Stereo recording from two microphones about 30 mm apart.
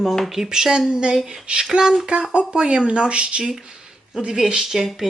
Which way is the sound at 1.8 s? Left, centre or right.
Right.